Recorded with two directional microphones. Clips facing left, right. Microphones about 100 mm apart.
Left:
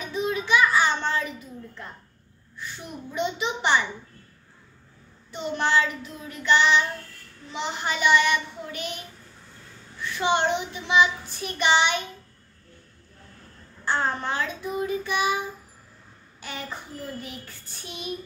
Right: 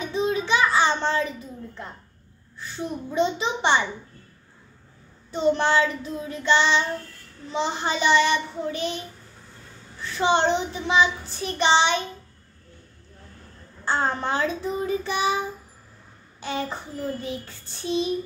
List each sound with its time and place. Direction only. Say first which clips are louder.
0.0 s a sound: right 3 dB; 30° right (ahead or behind)
2.8 s child singing: right 6 dB; 30° right (ahead or behind)
5.3 s child singing: right 4 dB; 30° right (ahead or behind)
10.0 s child singing: right 3 dB; 30° right (ahead or behind)
13.8 s child singing: right 2 dB; 30° right (ahead or behind)
16.3 s a child's voice: right 8 dB; 25° right (ahead or behind)
17.2 s child singing: right 7 dB; 25° right (ahead or behind)